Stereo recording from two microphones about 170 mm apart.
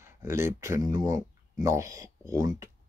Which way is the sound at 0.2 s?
15° right (ahead or behind).